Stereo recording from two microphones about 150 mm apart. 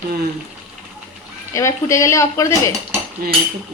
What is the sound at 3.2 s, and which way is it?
Cutlery, 75° right (ahead or behind).